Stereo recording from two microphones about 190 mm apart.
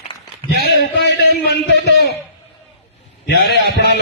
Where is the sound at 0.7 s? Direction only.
65° left (ahead or behind).